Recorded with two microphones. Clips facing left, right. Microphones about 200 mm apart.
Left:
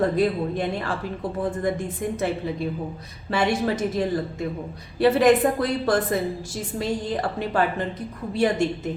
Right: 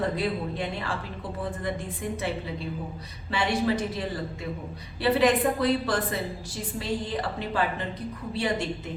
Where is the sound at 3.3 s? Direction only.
45° left (ahead or behind).